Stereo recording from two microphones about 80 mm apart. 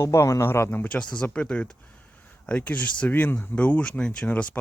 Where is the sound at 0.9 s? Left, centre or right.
Centre.